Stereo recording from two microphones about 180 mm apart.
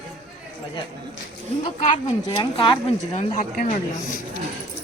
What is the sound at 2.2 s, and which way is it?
A woman's voice, 25° left (ahead or behind).